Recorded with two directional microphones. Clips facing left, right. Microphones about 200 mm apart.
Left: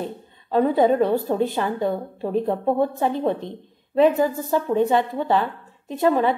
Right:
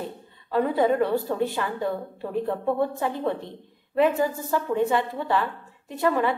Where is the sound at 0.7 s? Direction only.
20° left (ahead or behind).